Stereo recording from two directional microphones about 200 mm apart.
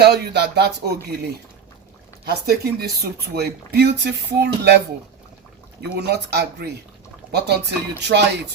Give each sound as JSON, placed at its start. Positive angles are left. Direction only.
{"t": 0.0, "sound": "speech", "side_deg": -55}
{"t": 5.8, "sound": "speech", "side_deg": -55}